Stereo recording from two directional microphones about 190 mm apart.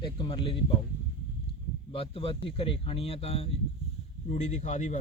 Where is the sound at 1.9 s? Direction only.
30° left (ahead or behind).